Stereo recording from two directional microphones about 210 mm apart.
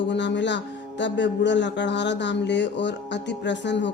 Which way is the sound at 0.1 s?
55° left (ahead or behind).